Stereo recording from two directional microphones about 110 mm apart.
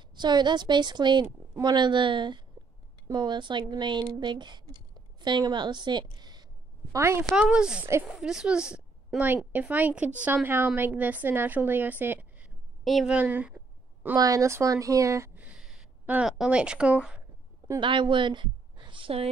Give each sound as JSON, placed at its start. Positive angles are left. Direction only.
{"t": 0.1, "sound": "a woman's voice", "side_deg": -40}
{"t": 6.9, "sound": "a woman's voice", "side_deg": -25}
{"t": 7.3, "sound": "a woman's voice", "side_deg": -5}
{"t": 12.8, "sound": "a woman's voice", "side_deg": 0}
{"t": 13.1, "sound": "a woman's voice", "side_deg": -15}
{"t": 14.1, "sound": "speech", "side_deg": -35}
{"t": 15.3, "sound": "a sound", "side_deg": -15}
{"t": 17.7, "sound": "a woman's voice", "side_deg": -45}